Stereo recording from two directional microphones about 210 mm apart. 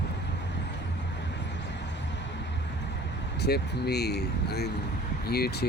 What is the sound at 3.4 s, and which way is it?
Speech, 50° left (ahead or behind).